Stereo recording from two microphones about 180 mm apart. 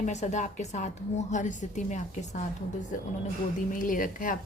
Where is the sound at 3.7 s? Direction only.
45° left (ahead or behind).